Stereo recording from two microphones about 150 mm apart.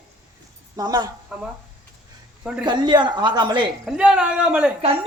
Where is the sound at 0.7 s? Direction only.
25° right (ahead or behind).